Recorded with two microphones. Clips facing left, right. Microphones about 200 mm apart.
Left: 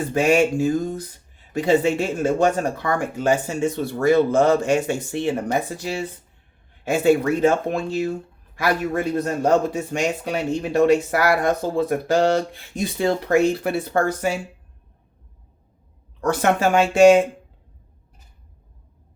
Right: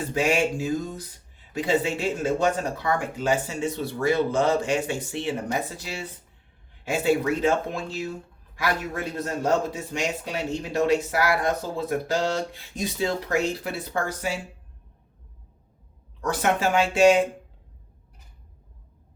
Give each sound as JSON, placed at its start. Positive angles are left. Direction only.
{"t": 0.1, "sound": "speech", "side_deg": 50}
{"t": 7.0, "sound": "speech", "side_deg": 50}
{"t": 16.4, "sound": "speech", "side_deg": 45}